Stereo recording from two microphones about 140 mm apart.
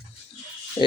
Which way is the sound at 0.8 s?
40° left (ahead or behind).